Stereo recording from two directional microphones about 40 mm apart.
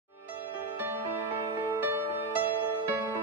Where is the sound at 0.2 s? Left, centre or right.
Right.